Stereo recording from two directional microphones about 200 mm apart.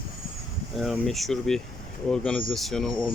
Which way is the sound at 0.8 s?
Centre (ahead or behind).